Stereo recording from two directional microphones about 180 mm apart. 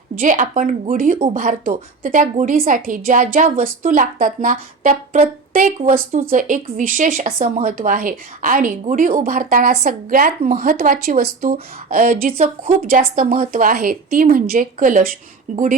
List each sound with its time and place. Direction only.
0.2 s speech: 45° right (ahead or behind)